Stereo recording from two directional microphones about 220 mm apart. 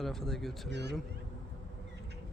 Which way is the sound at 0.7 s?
50° right (ahead or behind).